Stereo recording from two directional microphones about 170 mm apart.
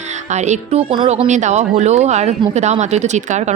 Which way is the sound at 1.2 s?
45° right (ahead or behind).